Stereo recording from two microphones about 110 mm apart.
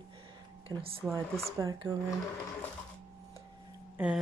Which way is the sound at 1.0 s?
25° right (ahead or behind).